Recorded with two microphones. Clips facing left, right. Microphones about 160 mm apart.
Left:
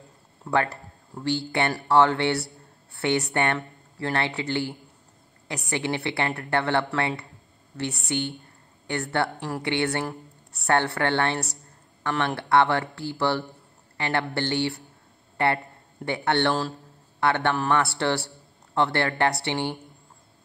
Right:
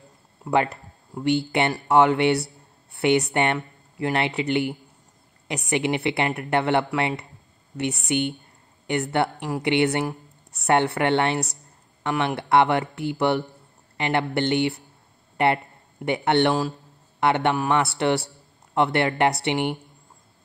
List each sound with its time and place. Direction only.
0.4 s a woman's voice: 15° right (ahead or behind)